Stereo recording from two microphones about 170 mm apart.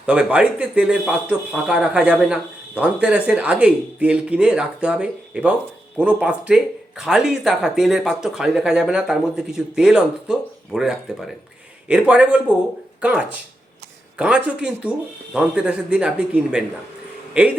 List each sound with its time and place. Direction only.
0.0 s speech: 5° right (ahead or behind)